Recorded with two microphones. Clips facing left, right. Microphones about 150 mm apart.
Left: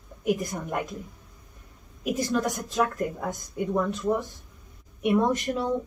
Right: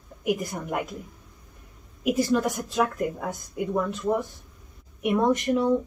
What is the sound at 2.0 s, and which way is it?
Speech, 5° right (ahead or behind).